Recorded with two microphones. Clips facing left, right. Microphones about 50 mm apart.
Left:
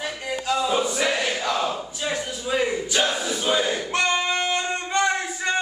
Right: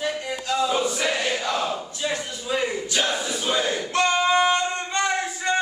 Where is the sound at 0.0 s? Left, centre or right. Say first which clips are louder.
Right 1 dB; centre.